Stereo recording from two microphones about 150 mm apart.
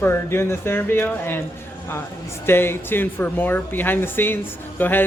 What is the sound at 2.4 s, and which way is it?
Speech, 15° left (ahead or behind).